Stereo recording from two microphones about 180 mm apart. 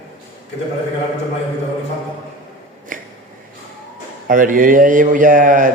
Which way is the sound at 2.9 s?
50° right (ahead or behind).